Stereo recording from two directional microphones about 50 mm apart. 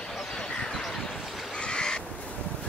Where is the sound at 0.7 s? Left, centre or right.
Centre.